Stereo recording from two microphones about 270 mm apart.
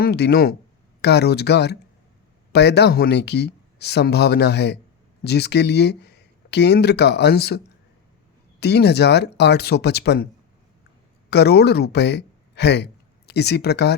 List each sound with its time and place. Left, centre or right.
0.0 s speech: left
8.6 s speech: left
11.3 s speech: left